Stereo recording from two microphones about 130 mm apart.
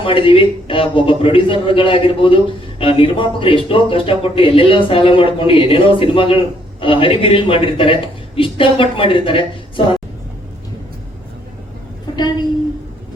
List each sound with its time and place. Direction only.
0.0 s a man's voice: 40° left (ahead or behind)